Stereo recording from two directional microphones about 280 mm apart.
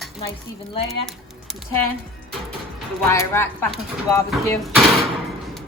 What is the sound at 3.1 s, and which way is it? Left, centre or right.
Speech, centre.